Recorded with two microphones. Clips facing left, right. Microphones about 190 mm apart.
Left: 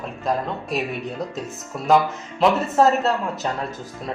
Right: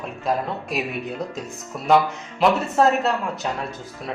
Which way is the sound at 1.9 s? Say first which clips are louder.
Even; centre (ahead or behind).